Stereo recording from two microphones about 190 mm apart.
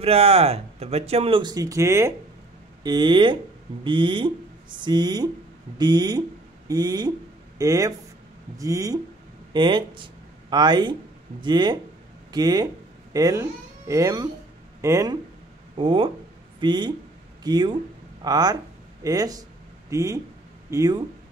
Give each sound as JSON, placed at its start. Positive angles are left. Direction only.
{"t": 0.0, "sound": "speech", "side_deg": -30}
{"t": 15.7, "sound": "speech", "side_deg": -25}